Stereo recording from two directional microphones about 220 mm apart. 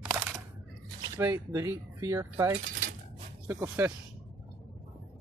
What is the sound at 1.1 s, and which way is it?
Speech, 10° right (ahead or behind).